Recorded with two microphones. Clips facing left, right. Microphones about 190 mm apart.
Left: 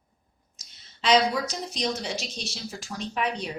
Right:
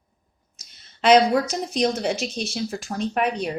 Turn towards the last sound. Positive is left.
turn(degrees=-55)  # may be behind; listen again after turning